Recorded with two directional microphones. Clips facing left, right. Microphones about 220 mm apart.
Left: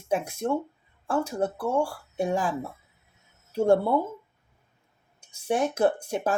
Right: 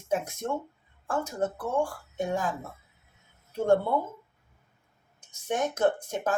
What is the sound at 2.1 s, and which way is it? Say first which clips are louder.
Speech: left 3 dB; 30° left (ahead or behind).